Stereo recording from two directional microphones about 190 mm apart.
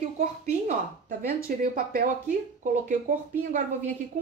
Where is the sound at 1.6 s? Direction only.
50° right (ahead or behind).